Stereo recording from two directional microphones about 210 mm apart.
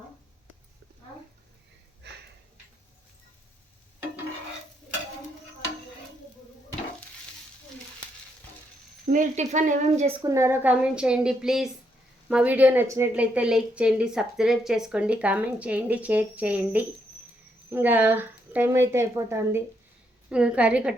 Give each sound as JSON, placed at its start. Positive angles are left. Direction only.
{"t": 9.1, "sound": "speech", "side_deg": -35}
{"t": 10.2, "sound": "a woman's voice", "side_deg": -15}